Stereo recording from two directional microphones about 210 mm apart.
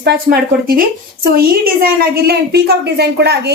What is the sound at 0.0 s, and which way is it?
Speech, 50° right (ahead or behind).